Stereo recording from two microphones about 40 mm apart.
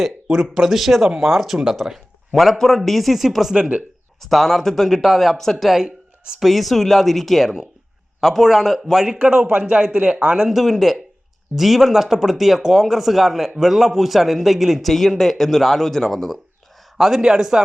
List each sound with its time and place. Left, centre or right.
0.0 s speech: centre
3.5 s speech: right
4.2 s speech: centre
9.0 s speech: right
10.5 s speech: centre
14.8 s speech: centre
17.0 s a man's voice: centre